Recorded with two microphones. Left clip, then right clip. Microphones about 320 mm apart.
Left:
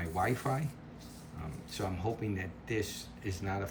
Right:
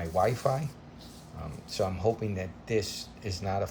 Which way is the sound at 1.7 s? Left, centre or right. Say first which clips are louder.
Right 9 dB; centre.